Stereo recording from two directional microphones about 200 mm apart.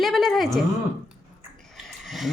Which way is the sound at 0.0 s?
Centre (ahead or behind).